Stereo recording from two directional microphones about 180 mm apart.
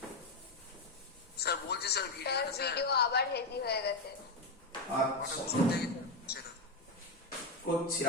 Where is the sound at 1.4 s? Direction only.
65° left (ahead or behind).